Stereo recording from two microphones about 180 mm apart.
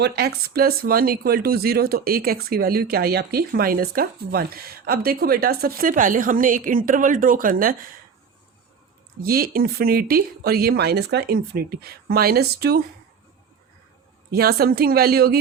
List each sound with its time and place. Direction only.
0.0 s speech: 65° right (ahead or behind)
9.2 s speech: 55° right (ahead or behind)
14.3 s speech: 60° right (ahead or behind)